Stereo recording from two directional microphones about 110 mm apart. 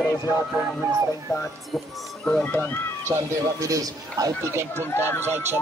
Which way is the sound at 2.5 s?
15° left (ahead or behind).